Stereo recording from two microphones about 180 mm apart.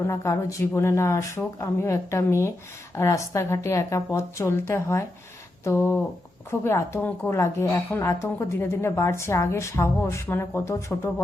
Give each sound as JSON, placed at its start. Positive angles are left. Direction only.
{"t": 0.1, "sound": "a woman's voice", "side_deg": 15}